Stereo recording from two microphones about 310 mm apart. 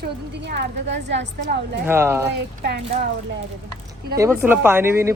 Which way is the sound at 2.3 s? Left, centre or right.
Right.